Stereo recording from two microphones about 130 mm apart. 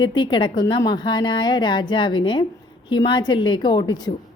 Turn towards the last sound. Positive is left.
turn(degrees=30)  # may be behind; listen again after turning